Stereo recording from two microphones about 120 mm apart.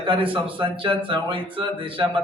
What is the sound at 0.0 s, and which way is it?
A man's voice, 45° right (ahead or behind).